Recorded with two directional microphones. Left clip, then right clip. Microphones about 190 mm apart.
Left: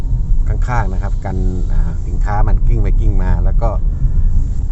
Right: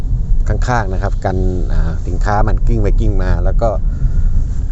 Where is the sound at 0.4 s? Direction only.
25° right (ahead or behind).